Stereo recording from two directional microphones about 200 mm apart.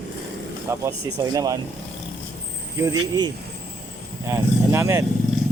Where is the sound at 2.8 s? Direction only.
20° right (ahead or behind).